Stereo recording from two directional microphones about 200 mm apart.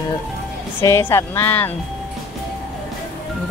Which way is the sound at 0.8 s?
15° left (ahead or behind).